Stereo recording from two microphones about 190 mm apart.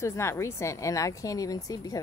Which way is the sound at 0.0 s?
15° left (ahead or behind).